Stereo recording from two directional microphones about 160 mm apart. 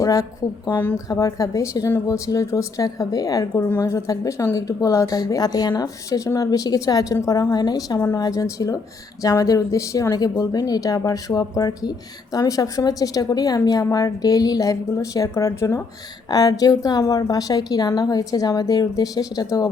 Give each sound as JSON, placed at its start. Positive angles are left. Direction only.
{"t": 0.0, "sound": "a woman's voice", "side_deg": 20}